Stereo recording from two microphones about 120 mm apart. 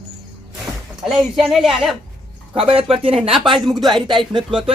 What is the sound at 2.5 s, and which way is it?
Speech, 50° right (ahead or behind).